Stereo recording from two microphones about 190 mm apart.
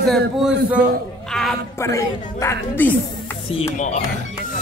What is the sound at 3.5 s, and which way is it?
Speech, 35° left (ahead or behind).